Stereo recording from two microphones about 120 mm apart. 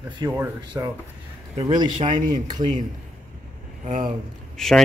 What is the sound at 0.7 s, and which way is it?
Speech, 25° right (ahead or behind).